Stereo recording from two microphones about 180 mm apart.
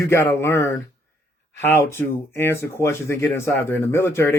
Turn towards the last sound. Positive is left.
turn(degrees=15)  # may be behind; listen again after turning